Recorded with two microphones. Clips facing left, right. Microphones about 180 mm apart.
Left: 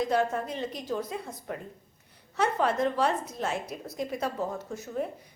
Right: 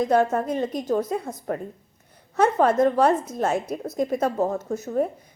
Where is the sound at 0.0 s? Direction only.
50° right (ahead or behind).